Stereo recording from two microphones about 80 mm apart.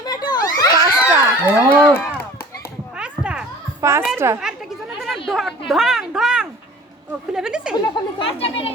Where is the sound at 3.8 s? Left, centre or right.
Right.